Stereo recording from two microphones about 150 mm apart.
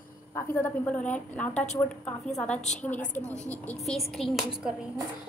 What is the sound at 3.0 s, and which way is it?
Speech, 55° left (ahead or behind).